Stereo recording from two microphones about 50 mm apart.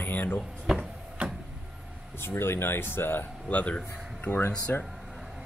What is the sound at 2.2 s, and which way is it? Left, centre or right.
Speech, left.